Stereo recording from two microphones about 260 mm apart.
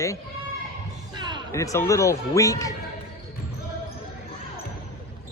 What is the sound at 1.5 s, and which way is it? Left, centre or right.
Speech, centre.